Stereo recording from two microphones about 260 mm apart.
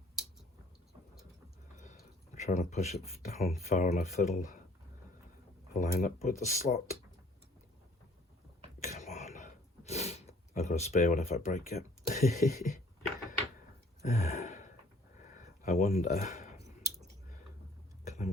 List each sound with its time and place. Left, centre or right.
1.8 s speech: left
5.7 s speech: left
8.8 s a sound: left
14.0 s gasp: left
15.6 s speech: left
18.0 s a sound: left